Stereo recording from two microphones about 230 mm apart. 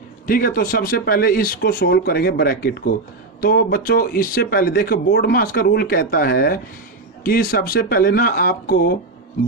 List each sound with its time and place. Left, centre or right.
0.3 s speech: left